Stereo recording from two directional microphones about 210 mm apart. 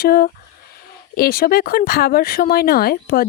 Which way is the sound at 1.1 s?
45° left (ahead or behind).